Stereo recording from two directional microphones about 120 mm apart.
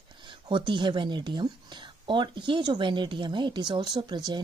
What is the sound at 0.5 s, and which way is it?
Speech, 40° right (ahead or behind).